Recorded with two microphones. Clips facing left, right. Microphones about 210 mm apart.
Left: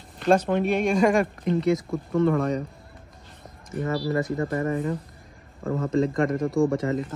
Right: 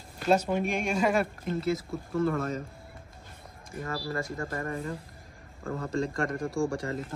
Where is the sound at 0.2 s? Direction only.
5° right (ahead or behind).